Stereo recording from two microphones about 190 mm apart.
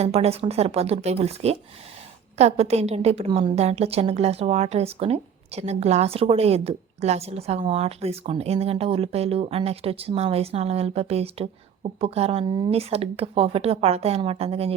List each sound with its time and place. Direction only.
0.0 s a woman's voice: 30° right (ahead or behind)